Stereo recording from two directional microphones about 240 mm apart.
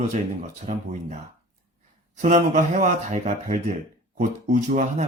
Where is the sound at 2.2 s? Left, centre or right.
Right.